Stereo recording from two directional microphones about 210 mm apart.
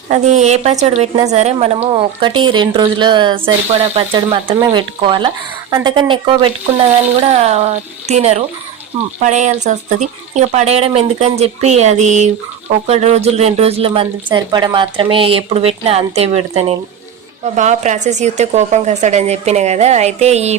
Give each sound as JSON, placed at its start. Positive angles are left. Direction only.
{"t": 0.1, "sound": "a woman's voice", "side_deg": -35}